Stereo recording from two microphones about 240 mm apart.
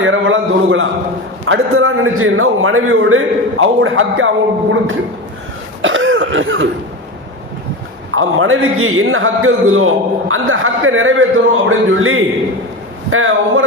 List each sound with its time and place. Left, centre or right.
0.0 s a man's voice: right
5.8 s throat clearing: right
8.1 s a man's voice: right